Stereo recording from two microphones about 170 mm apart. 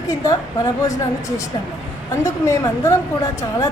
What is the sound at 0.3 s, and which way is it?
Speech, 20° left (ahead or behind).